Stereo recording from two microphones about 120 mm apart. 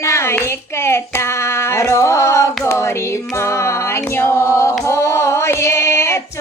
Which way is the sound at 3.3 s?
25° left (ahead or behind).